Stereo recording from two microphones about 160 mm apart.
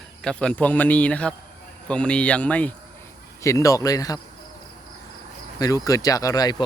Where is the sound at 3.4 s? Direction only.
20° left (ahead or behind).